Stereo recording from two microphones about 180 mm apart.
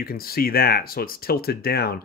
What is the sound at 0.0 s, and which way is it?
Speech, 55° left (ahead or behind).